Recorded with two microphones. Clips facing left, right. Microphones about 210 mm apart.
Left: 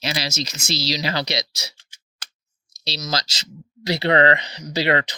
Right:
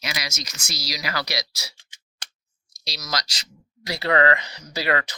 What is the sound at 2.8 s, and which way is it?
Speech, 25° left (ahead or behind).